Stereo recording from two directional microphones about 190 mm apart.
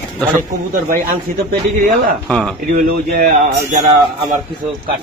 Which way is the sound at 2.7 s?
50° right (ahead or behind).